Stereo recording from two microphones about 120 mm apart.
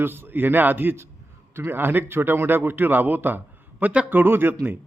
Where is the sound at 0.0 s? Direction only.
20° right (ahead or behind).